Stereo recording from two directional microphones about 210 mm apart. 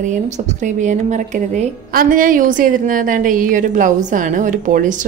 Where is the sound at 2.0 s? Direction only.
40° right (ahead or behind).